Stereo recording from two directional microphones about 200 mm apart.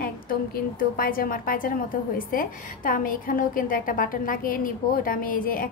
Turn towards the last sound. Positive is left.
turn(degrees=45)  # may be behind; listen again after turning